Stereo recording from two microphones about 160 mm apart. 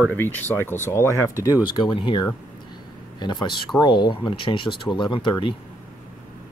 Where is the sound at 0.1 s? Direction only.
10° left (ahead or behind); by 5.5 s 30° left (ahead or behind).